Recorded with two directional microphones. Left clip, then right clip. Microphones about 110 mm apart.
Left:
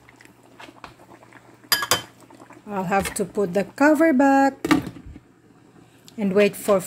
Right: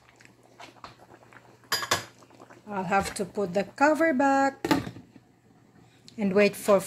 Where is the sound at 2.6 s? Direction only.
70° left (ahead or behind).